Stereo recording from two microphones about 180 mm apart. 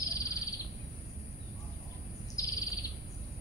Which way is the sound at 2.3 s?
20° left (ahead or behind).